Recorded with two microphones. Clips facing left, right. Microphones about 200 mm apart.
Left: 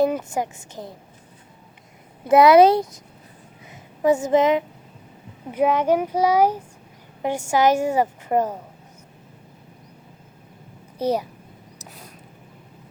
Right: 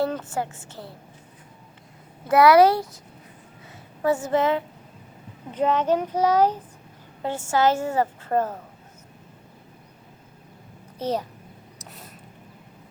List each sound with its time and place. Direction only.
0.0 s a woman's voice: 15° left (ahead or behind)
2.2 s a woman's voice: 20° left (ahead or behind)
10.9 s a child's voice: 10° left (ahead or behind)
11.8 s a sound: centre (ahead or behind)